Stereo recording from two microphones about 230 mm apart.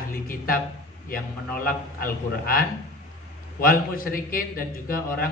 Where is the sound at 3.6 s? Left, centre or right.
Left.